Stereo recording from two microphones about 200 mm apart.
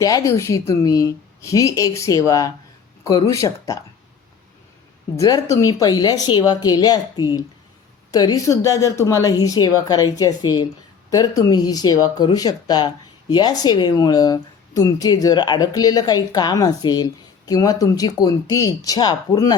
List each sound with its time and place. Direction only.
0.0 s a woman's voice: 15° left (ahead or behind)
5.1 s a woman's voice: 15° left (ahead or behind)